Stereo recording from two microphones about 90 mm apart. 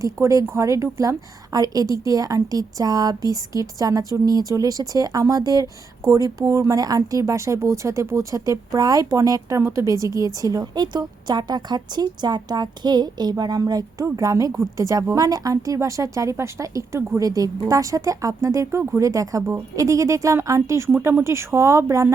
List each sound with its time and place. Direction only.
0.0 s a woman's voice: 35° right (ahead or behind)
10.2 s a woman's voice: 45° right (ahead or behind)